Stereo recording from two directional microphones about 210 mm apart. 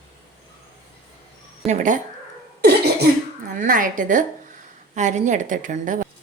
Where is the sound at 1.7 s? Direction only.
35° right (ahead or behind).